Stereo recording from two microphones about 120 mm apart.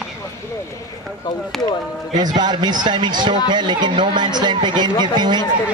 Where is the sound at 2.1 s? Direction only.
35° right (ahead or behind).